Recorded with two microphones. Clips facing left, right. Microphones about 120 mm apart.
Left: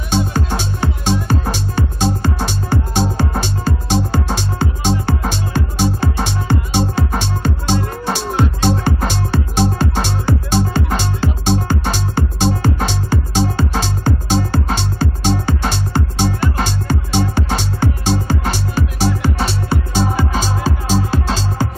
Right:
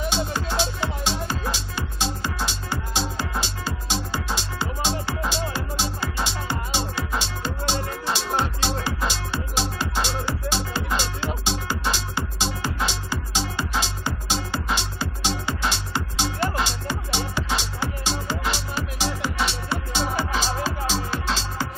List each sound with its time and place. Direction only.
0.1 s music: 50° left (ahead or behind)